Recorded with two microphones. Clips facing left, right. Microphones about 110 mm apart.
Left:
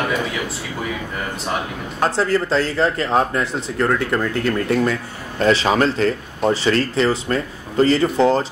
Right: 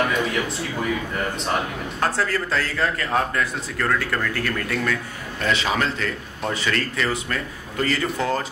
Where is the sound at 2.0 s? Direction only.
25° left (ahead or behind).